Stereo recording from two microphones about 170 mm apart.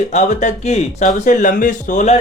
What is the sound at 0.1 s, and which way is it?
Speech, 45° left (ahead or behind).